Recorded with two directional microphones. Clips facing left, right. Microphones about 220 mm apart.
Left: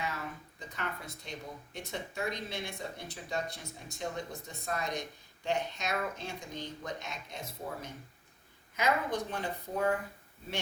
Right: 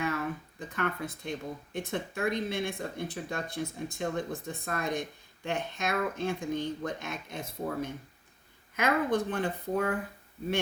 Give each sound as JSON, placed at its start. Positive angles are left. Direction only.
{"t": 0.7, "sound": "speech", "side_deg": -55}